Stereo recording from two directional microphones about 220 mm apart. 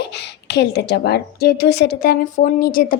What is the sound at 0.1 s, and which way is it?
A woman's voice, 50° left (ahead or behind).